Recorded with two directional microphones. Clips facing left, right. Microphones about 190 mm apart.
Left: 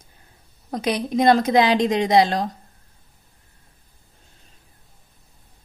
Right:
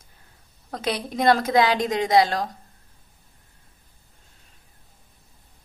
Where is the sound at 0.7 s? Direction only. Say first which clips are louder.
Left 5 dB; 15° left (ahead or behind).